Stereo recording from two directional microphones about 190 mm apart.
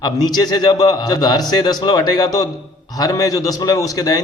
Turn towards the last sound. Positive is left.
turn(degrees=20)  # may be behind; listen again after turning